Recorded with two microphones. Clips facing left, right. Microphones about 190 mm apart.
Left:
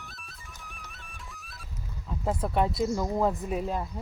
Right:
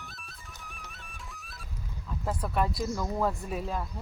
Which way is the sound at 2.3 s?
25° left (ahead or behind).